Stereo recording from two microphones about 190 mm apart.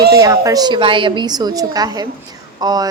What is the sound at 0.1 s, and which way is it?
A woman's voice, 15° right (ahead or behind).